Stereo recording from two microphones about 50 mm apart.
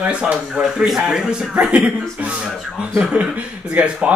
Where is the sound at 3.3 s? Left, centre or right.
Right.